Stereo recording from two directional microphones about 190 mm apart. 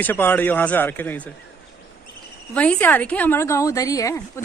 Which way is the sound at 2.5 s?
5° left (ahead or behind).